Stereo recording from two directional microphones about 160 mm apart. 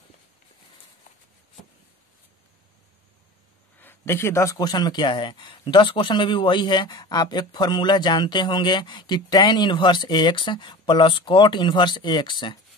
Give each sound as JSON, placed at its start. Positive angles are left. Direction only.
{"t": 3.8, "sound": "speech", "side_deg": 15}